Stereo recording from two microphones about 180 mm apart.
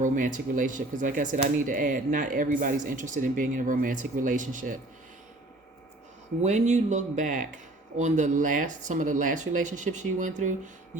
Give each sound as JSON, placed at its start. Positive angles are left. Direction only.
{"t": 0.0, "sound": "speech", "side_deg": -45}
{"t": 6.4, "sound": "speech", "side_deg": -40}